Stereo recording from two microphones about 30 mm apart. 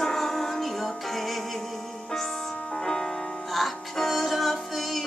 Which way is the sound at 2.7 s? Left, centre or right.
Centre.